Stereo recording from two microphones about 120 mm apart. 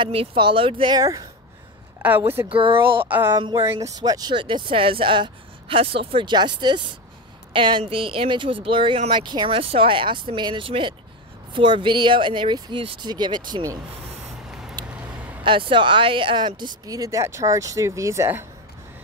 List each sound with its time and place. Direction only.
0.0 s speech: 55° right (ahead or behind)
0.9 s speech: 30° right (ahead or behind)
2.0 s a sound: 15° right (ahead or behind)
2.5 s speech: 45° right (ahead or behind)
3.1 s speech: 20° right (ahead or behind)
3.3 s speech: 40° right (ahead or behind)
3.6 s speech: 25° right (ahead or behind)
9.6 s speech: 50° right (ahead or behind); by 13.7 s 35° right (ahead or behind)
14.9 s vehicle: 15° right (ahead or behind)
15.4 s speech: 45° right (ahead or behind); by 18.5 s 20° right (ahead or behind)